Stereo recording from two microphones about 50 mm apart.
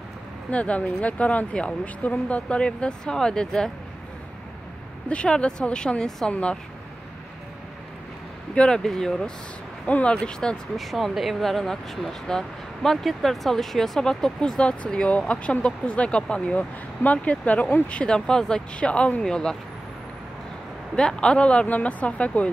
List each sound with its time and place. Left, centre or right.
0.5 s speech: left; by 3.7 s centre
5.1 s speech: left
8.5 s speech: centre
9.8 s speech: left
10.8 s speech: centre; by 18.0 s left
18.0 s speech: centre
18.8 s speech: left
20.9 s speech: centre